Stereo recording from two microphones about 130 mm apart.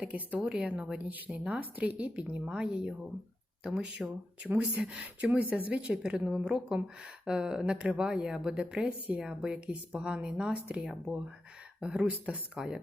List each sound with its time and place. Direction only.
0.0 s speech: 10° right (ahead or behind)